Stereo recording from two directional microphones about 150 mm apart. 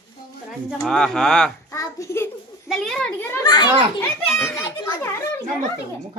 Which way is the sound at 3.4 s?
25° left (ahead or behind).